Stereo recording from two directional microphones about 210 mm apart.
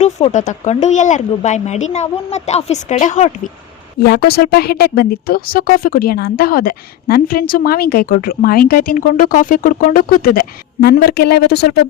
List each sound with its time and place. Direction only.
0.0 s speech: 30° left (ahead or behind)
4.0 s speech: 50° left (ahead or behind)